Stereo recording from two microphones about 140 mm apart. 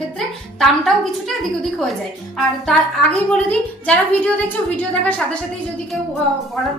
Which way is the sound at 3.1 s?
10° left (ahead or behind).